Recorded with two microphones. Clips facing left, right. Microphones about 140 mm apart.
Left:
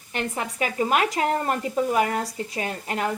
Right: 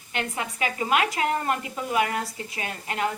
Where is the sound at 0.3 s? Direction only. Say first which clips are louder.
Left 4 dB; 45° left (ahead or behind).